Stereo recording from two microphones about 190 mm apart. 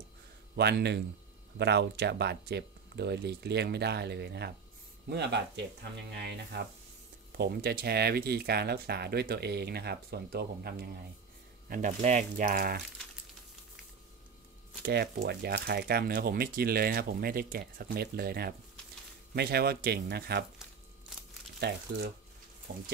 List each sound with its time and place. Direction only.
0.6 s speech: 60° right (ahead or behind)
11.7 s speech: 40° right (ahead or behind)
14.8 s speech: 60° right (ahead or behind)
21.5 s speech: 60° right (ahead or behind)